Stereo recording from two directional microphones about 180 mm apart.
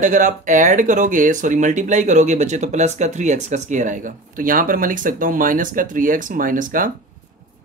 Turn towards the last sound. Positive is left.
turn(degrees=-50)  # may be behind; listen again after turning